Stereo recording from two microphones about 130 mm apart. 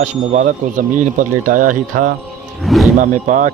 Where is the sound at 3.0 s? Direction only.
90° right.